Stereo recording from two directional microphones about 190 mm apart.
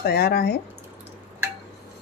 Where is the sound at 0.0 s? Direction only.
55° left (ahead or behind).